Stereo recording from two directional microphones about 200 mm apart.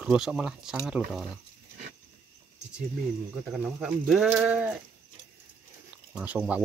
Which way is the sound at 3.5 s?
5° right (ahead or behind).